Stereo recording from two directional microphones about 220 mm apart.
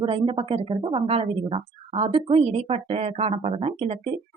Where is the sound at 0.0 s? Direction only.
25° right (ahead or behind).